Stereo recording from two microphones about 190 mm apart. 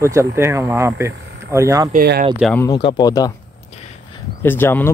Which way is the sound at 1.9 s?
55° right (ahead or behind).